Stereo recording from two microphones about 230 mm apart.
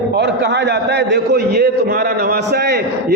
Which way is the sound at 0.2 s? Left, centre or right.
Right.